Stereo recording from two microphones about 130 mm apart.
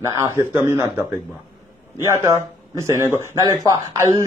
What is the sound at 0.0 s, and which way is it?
A man's voice, 20° right (ahead or behind).